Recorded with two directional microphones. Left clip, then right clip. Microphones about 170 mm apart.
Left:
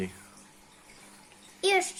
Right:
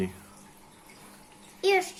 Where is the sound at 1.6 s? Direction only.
55° left (ahead or behind).